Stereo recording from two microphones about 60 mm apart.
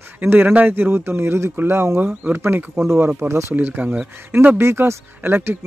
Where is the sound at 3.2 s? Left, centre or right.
Right.